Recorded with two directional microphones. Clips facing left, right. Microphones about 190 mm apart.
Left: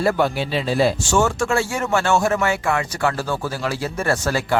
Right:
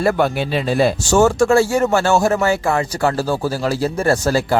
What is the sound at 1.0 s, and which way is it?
Speech, 35° right (ahead or behind).